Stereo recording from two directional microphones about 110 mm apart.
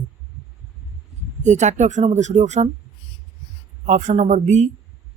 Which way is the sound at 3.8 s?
90° right.